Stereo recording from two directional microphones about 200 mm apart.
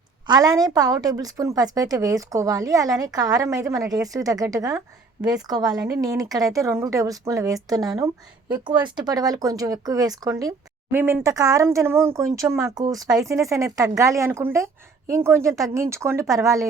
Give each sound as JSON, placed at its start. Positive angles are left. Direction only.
{"t": 0.3, "sound": "a woman's voice", "side_deg": -20}